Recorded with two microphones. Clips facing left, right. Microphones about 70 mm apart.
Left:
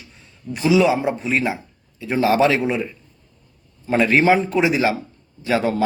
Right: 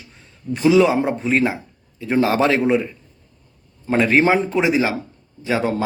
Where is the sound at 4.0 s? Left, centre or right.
Right.